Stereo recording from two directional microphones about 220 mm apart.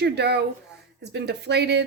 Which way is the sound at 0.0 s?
50° right (ahead or behind).